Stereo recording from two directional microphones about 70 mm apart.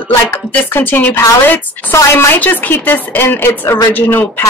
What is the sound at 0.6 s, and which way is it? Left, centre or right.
A woman's voice, left.